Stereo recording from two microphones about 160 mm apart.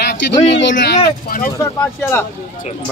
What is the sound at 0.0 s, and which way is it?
Speech, 90° left.